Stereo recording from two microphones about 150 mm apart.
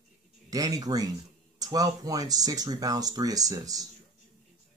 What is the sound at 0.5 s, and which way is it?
Speech, 25° right (ahead or behind).